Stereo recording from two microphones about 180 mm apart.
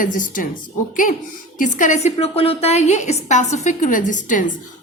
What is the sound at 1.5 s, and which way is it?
A woman's voice, 45° left (ahead or behind).